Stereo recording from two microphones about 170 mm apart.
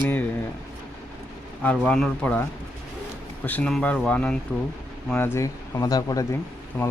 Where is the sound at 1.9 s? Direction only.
5° left (ahead or behind).